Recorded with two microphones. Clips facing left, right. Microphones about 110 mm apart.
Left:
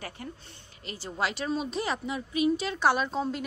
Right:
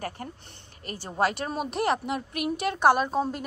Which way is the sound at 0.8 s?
55° right (ahead or behind).